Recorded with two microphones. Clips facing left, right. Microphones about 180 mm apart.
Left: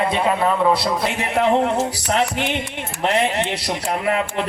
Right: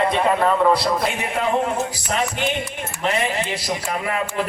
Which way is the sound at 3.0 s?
70° left (ahead or behind).